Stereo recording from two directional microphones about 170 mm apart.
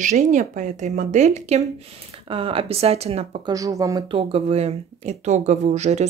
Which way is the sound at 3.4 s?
20° right (ahead or behind).